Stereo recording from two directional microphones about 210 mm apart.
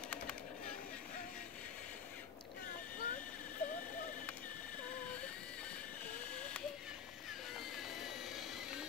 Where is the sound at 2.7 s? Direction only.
40° left (ahead or behind).